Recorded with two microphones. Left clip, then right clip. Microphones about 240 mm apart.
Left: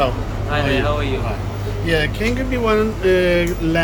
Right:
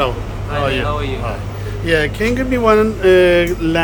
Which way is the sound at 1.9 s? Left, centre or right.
Centre.